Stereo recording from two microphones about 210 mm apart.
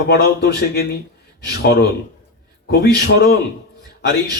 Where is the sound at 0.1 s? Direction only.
50° left (ahead or behind).